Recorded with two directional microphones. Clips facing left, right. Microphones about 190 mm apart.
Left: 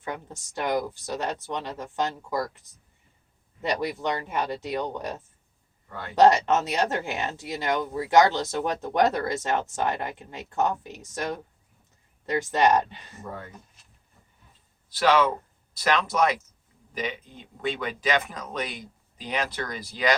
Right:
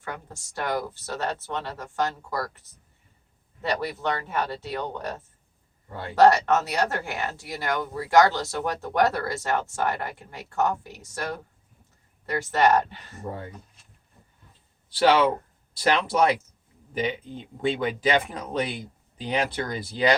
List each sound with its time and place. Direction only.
0.0 s speech: 20° left (ahead or behind)
3.6 s speech: 15° left (ahead or behind)
5.9 s speech: 30° right (ahead or behind)
6.1 s speech: 20° left (ahead or behind)
13.2 s speech: 30° right (ahead or behind)
14.8 s speech: 30° right (ahead or behind)